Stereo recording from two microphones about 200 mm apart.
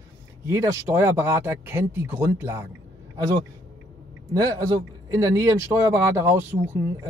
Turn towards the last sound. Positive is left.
turn(degrees=-10)  # may be behind; listen again after turning